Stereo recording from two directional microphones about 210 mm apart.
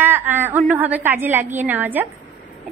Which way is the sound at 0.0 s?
10° right (ahead or behind).